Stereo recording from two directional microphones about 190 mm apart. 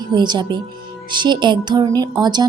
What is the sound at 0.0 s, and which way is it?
A woman's voice, 25° right (ahead or behind).